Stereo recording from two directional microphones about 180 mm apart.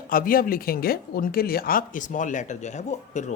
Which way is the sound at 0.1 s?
50° left (ahead or behind).